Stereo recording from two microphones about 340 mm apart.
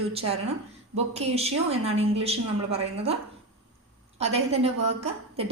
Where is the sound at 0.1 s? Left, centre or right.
Centre.